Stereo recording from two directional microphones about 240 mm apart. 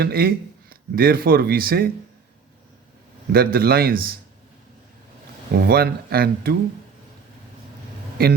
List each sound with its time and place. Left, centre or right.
0.0 s speech: right
3.3 s speech: right
5.5 s speech: right